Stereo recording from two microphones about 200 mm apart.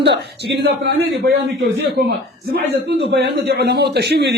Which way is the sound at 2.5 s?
55° right (ahead or behind).